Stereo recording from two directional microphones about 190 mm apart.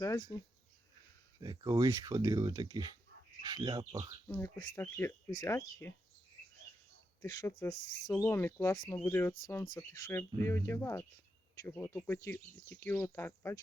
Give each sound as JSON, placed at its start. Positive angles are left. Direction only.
{"t": 0.0, "sound": "speech", "side_deg": 20}
{"t": 1.4, "sound": "speech", "side_deg": -20}
{"t": 4.3, "sound": "speech", "side_deg": 15}
{"t": 7.2, "sound": "speech", "side_deg": 15}